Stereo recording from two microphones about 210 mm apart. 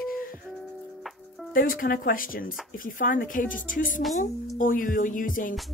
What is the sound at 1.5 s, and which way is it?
A woman's voice, 40° left (ahead or behind).